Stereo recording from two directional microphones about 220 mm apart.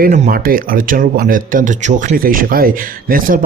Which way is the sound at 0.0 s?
40° right (ahead or behind).